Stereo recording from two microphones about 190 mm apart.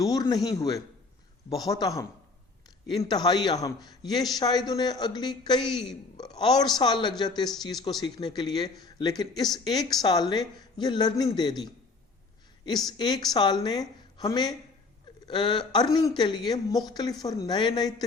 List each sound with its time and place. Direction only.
0.0 s a man's voice: 20° left (ahead or behind)
3.0 s a woman's voice: 20° left (ahead or behind)